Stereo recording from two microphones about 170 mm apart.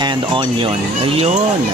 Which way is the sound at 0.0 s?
30° right (ahead or behind).